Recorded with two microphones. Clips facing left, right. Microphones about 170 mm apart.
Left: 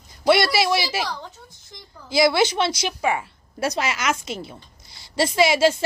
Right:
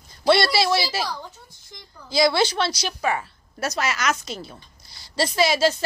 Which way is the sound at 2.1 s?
20° left (ahead or behind).